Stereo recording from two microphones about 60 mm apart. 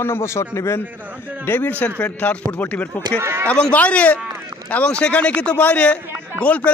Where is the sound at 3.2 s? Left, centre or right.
Right.